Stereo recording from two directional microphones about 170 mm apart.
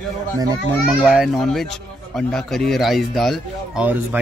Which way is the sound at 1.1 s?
Centre (ahead or behind).